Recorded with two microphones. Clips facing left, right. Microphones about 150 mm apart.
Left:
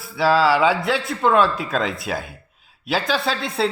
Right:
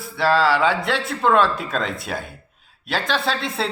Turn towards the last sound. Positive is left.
turn(degrees=0)  # may be behind; listen again after turning